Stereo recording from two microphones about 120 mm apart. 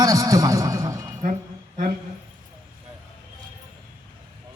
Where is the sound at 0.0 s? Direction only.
30° right (ahead or behind).